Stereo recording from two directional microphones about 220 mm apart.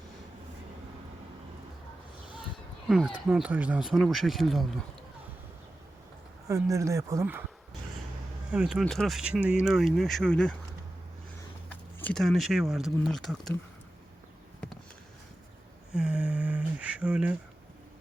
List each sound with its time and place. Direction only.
2.9 s speech: 5° right (ahead or behind)
6.5 s speech: 15° right (ahead or behind)
8.5 s speech: 5° right (ahead or behind)
11.7 s speech: 5° left (ahead or behind)
16.0 s a sound: 5° right (ahead or behind)